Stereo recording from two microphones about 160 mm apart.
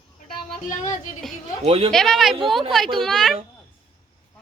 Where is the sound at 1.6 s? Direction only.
40° right (ahead or behind).